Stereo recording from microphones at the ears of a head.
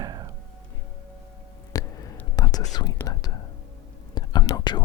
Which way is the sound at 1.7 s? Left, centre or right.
Left.